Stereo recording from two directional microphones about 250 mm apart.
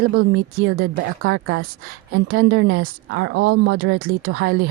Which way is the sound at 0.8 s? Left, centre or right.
Right.